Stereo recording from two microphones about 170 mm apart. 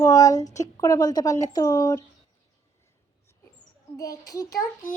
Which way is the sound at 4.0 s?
20° left (ahead or behind).